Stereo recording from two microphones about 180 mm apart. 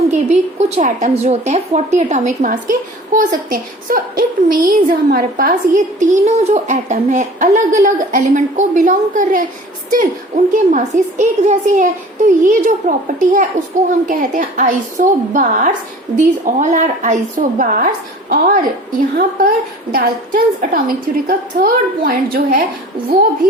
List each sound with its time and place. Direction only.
0.1 s a woman's voice: 40° right (ahead or behind)